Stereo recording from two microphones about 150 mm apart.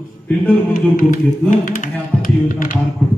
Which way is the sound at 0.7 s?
65° left (ahead or behind).